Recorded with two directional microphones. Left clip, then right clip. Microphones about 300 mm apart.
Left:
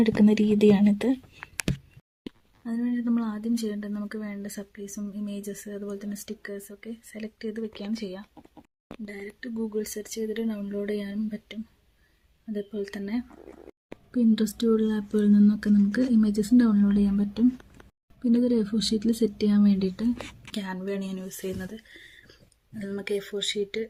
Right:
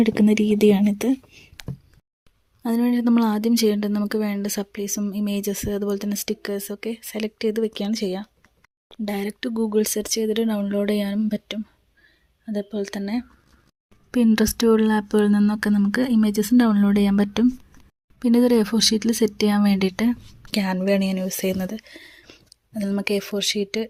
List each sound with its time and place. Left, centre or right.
0.0 s speech: right
2.6 s speech: right
14.7 s speech: right
18.4 s speech: right
18.8 s speech: right
19.5 s speech: right
23.4 s speech: right